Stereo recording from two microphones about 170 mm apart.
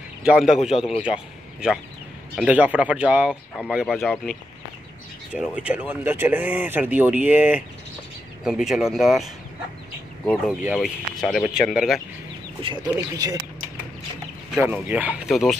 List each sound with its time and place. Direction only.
0.2 s speech: 5° right (ahead or behind)
10.6 s speech: 5° right (ahead or behind)
12.8 s speech: 20° right (ahead or behind)
14.5 s speech: 10° right (ahead or behind)